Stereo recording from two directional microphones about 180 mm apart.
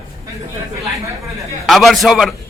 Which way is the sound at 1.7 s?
Centre (ahead or behind).